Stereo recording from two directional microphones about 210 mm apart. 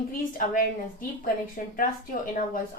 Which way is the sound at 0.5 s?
40° left (ahead or behind).